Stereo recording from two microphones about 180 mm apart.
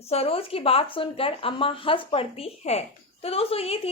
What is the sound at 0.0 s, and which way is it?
A woman's voice, 35° left (ahead or behind).